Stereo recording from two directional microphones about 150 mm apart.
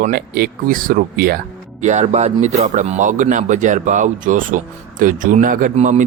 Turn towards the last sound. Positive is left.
turn(degrees=-50)  # may be behind; listen again after turning